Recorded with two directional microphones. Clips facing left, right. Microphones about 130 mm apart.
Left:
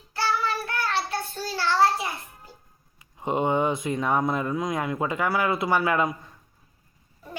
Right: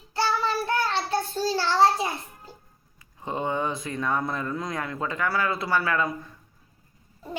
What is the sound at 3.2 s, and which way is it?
Speech, 20° left (ahead or behind).